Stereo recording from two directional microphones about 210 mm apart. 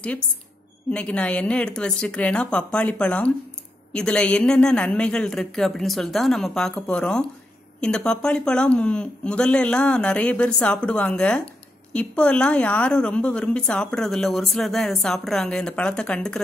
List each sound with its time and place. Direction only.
0.8 s a woman's voice: 5° left (ahead or behind)